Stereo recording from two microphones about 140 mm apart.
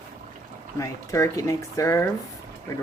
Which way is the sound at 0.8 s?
20° left (ahead or behind).